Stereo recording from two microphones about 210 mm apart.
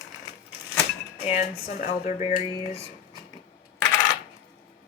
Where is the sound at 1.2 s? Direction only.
35° left (ahead or behind).